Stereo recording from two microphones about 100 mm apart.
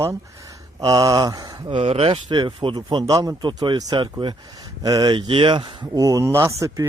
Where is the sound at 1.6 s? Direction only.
70° right (ahead or behind).